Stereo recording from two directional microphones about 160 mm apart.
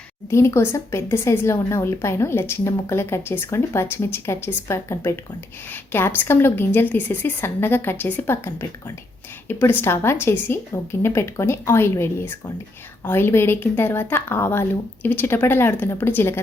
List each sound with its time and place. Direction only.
0.3 s speech: 15° left (ahead or behind)